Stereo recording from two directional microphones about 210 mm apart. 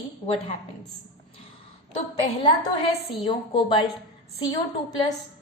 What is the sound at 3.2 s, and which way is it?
Speech, 25° left (ahead or behind).